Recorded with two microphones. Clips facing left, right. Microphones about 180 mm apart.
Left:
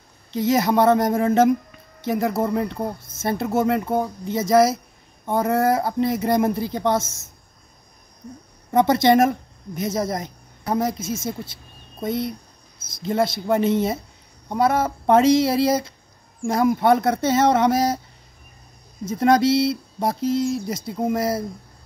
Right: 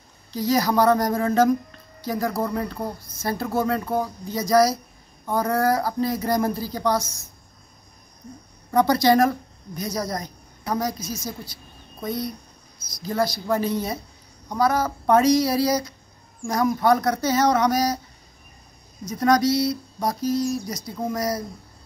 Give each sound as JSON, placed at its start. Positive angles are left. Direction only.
{"t": 0.3, "sound": "speech", "side_deg": 25}
{"t": 8.7, "sound": "a woman's voice", "side_deg": 25}
{"t": 19.0, "sound": "speech", "side_deg": 25}